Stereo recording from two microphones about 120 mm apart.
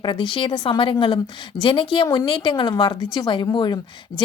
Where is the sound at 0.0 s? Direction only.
40° left (ahead or behind).